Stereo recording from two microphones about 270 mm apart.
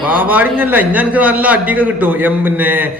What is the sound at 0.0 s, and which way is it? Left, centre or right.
A man's voice, centre.